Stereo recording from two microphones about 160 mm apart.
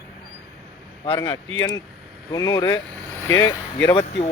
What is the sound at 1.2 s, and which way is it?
Speech, 25° left (ahead or behind).